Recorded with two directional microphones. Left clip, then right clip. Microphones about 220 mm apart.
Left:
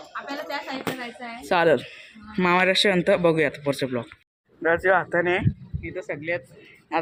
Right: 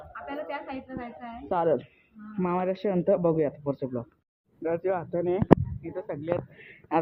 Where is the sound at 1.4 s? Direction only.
20° left (ahead or behind).